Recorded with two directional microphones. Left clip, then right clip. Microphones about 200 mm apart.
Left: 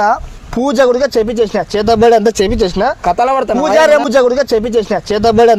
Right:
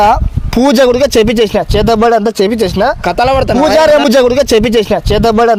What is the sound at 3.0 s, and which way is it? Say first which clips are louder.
Speech: right 2 dB; 55° right (ahead or behind).